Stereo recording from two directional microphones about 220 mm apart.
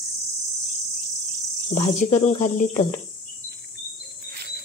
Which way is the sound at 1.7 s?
35° left (ahead or behind).